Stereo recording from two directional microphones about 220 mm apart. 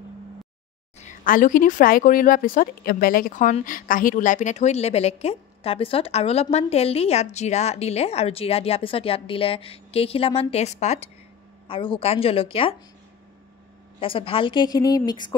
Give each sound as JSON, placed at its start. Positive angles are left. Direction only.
{"t": 0.9, "sound": "speech", "side_deg": 35}
{"t": 13.9, "sound": "speech", "side_deg": 25}